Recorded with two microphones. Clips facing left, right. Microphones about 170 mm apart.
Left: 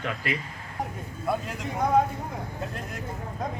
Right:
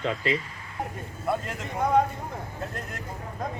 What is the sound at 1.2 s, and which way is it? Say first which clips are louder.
Speech: even; centre (ahead or behind).